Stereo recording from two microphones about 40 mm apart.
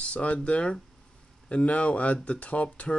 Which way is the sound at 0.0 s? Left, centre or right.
Left.